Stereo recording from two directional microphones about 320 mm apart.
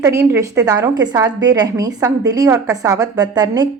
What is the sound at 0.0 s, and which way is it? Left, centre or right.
A woman's voice, centre.